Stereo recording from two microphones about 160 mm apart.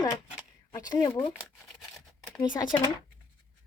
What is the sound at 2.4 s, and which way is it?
Speech, 25° left (ahead or behind).